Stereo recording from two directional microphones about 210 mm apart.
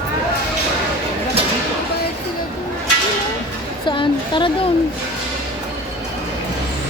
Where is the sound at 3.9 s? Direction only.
20° left (ahead or behind).